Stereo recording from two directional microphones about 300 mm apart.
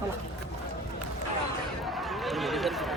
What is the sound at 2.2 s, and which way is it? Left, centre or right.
Run, centre.